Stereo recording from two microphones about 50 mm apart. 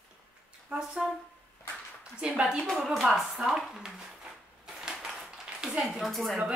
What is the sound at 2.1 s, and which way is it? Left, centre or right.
Speech, right.